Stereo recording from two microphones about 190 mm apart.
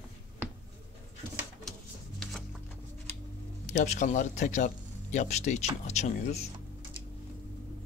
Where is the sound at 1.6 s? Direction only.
Centre (ahead or behind).